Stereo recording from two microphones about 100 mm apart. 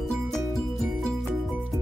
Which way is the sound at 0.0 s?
5° left (ahead or behind).